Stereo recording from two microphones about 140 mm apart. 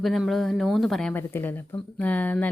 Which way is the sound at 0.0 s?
Centre (ahead or behind).